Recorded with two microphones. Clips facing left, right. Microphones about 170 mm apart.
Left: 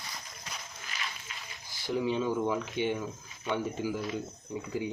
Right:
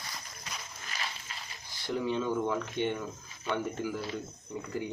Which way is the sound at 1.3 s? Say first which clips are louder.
Right 1 dB; 35° right (ahead or behind).